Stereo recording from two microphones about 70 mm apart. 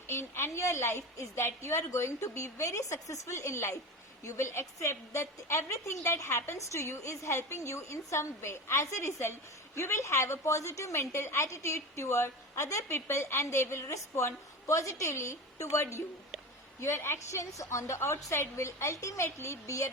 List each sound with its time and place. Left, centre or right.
0.1 s a woman's voice: left